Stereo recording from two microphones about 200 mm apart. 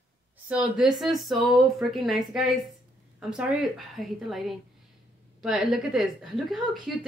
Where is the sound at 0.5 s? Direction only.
5° right (ahead or behind).